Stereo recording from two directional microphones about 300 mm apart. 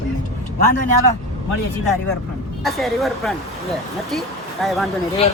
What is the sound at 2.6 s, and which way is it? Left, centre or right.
A woman's voice, centre.